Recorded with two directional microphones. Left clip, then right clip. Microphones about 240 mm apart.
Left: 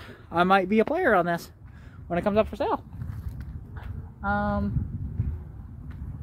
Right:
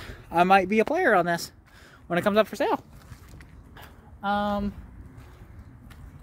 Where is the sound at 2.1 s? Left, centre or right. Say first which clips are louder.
Right 2 dB; centre.